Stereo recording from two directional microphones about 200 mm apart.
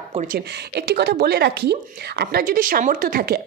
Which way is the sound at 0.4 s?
55° right (ahead or behind).